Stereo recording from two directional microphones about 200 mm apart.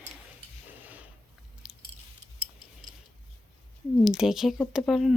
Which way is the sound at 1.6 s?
5° right (ahead or behind).